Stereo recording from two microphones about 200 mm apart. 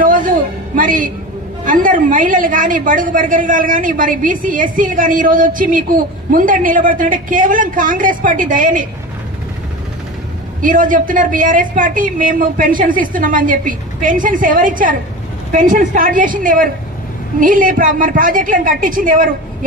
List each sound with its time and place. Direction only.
0.0 s a sound: 40° right (ahead or behind)
0.7 s a woman's voice: 40° right (ahead or behind)
10.6 s a woman's voice: 40° right (ahead or behind)